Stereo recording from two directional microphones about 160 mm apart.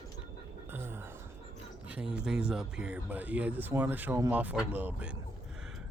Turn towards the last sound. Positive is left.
turn(degrees=-10)  # may be behind; listen again after turning